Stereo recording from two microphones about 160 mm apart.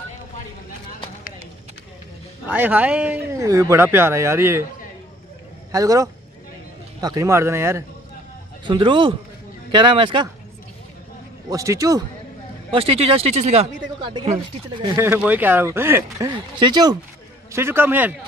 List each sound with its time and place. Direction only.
2.4 s speech: 10° right (ahead or behind)
5.7 s speech: 20° right (ahead or behind)
8.6 s speech: 30° right (ahead or behind)
11.4 s speech: 20° right (ahead or behind)
12.7 s speech: 35° right (ahead or behind)
15.0 s speech: 10° right (ahead or behind)
16.3 s speech: 30° right (ahead or behind)
17.5 s speech: 15° right (ahead or behind)